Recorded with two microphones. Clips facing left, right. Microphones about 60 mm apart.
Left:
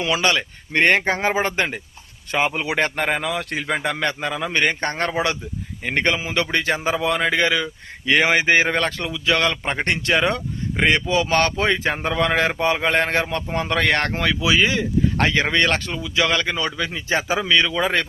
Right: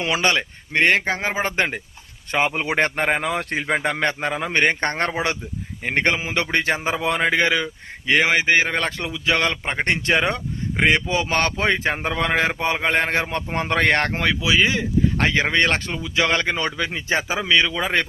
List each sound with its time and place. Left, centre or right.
0.0 s speech: right
0.8 s speech: centre
1.5 s a man's voice: right
3.9 s a man's voice: right
4.7 s a man's voice: right
8.0 s speech: centre
8.9 s speech: centre
9.5 s a man's voice: centre
9.8 s a man's voice: right
13.1 s a man's voice: right
16.0 s speech: right
17.2 s a man's voice: centre